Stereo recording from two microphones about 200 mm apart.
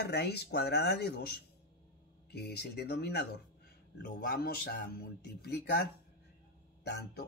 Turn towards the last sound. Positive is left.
turn(degrees=60)  # may be behind; listen again after turning